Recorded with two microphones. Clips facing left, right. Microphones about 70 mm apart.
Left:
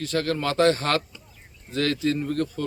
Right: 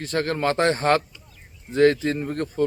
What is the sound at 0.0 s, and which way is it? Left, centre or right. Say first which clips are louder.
Speech: right 2 dB; right.